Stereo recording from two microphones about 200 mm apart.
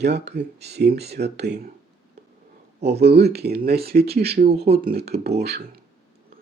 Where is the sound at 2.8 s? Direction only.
55° right (ahead or behind).